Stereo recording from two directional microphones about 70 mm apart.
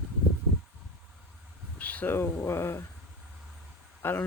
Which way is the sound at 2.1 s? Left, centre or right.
Left.